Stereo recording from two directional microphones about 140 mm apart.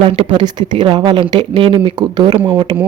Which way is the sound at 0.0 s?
35° right (ahead or behind).